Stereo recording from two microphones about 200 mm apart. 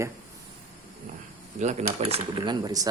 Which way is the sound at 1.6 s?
35° right (ahead or behind).